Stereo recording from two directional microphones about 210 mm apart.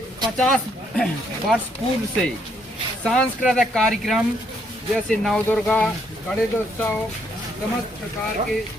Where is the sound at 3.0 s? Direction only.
Centre (ahead or behind).